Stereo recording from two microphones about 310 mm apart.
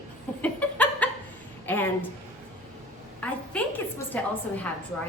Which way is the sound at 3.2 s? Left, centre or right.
Centre.